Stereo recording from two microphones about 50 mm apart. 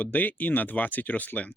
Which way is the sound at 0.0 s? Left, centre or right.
Left.